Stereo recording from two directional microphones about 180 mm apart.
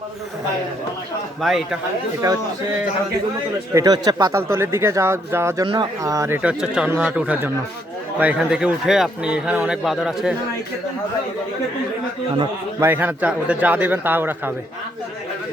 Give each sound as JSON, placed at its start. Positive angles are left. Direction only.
{"t": 1.4, "sound": "speech", "side_deg": 0}
{"t": 2.2, "sound": "speech", "side_deg": -20}
{"t": 3.8, "sound": "speech", "side_deg": -20}
{"t": 12.8, "sound": "speech", "side_deg": -10}